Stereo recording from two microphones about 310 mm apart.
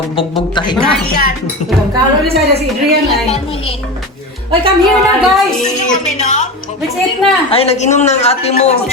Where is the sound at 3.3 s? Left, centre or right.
Centre.